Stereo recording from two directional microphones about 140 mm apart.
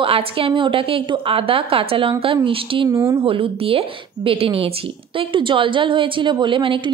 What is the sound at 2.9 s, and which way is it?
Speech, 20° right (ahead or behind).